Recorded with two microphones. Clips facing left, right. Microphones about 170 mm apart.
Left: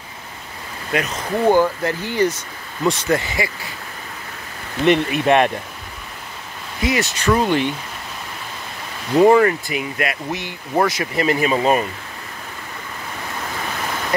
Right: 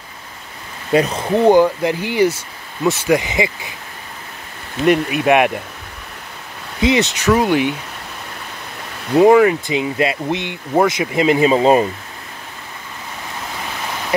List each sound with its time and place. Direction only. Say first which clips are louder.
0.9 s speech: right 7 dB; 30° right (ahead or behind)
1.4 s speech: right 4 dB; 15° right (ahead or behind)
4.8 s speech: right 1 dB; 5° right (ahead or behind)
6.8 s speech: right 5 dB; 25° right (ahead or behind)
7.2 s speech: right 2 dB; 10° right (ahead or behind)
9.1 s speech: right 2 dB; 5° right (ahead or behind)
9.7 s speech: right 5 dB; 25° right (ahead or behind)